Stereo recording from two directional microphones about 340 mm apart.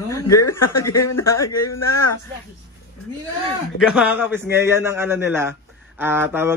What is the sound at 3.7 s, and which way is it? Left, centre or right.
A man's voice, centre.